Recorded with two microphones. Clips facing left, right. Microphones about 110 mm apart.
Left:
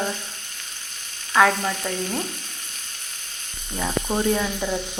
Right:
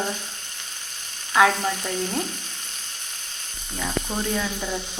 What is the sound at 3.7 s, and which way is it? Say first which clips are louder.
Speech: left 4 dB; 20° left (ahead or behind).